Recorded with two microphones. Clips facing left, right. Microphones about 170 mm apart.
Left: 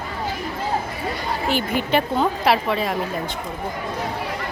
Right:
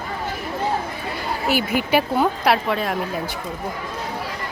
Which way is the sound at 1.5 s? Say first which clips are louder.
Right 2 dB; 5° right (ahead or behind).